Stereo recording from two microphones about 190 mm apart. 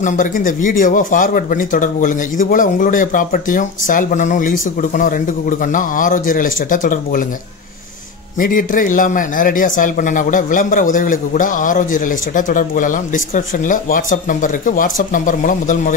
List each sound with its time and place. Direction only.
0.0 s a man's voice: 40° left (ahead or behind)
8.4 s a man's voice: 45° left (ahead or behind)